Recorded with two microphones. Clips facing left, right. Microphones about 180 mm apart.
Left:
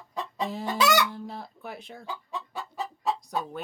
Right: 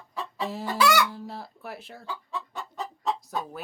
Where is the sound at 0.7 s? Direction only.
25° left (ahead or behind).